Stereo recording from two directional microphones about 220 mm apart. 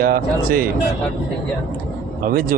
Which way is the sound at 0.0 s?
40° right (ahead or behind).